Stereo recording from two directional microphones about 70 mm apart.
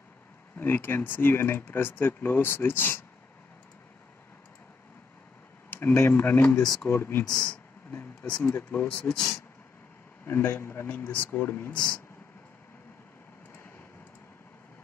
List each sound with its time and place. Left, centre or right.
0.6 s speech: left
5.7 s speech: left
7.2 s speech: centre
7.9 s a sound: left
8.4 s speech: left
8.8 s speech: centre
10.2 s speech: left
11.1 s speech: left
11.4 s speech: left